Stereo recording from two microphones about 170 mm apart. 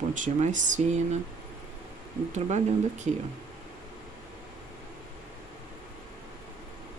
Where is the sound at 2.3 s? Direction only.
45° right (ahead or behind).